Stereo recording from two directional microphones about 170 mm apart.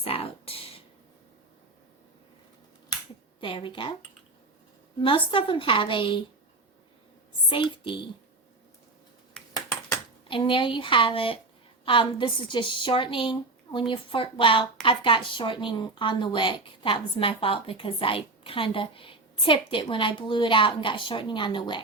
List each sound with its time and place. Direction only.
0.0 s a sound: 35° left (ahead or behind)
3.4 s a woman's voice: 30° left (ahead or behind)
4.9 s a woman's voice: 30° left (ahead or behind)
7.5 s a woman's voice: 30° left (ahead or behind)
10.2 s a woman's voice: 30° left (ahead or behind)